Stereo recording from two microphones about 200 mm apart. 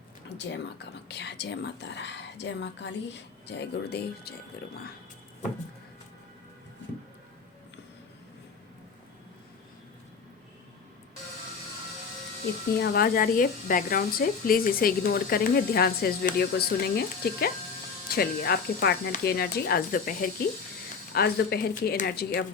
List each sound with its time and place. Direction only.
0.3 s speech: 60° left (ahead or behind)
12.8 s speech: 55° left (ahead or behind)